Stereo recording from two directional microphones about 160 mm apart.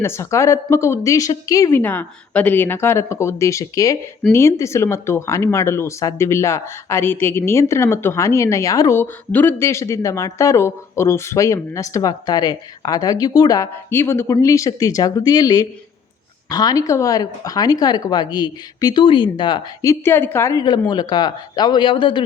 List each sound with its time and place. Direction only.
0.0 s speech: 15° left (ahead or behind); by 22.2 s 30° left (ahead or behind)